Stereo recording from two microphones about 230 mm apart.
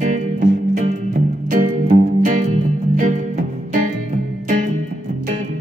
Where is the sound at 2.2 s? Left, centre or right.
Right.